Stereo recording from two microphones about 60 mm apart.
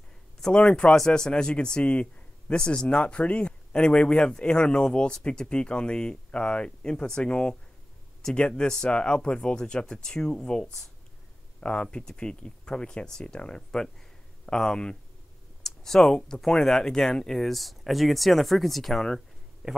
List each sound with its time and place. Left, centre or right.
0.4 s a man's voice: centre
19.6 s a man's voice: centre